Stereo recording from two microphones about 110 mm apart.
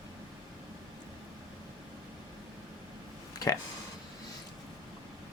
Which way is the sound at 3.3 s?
30° left (ahead or behind).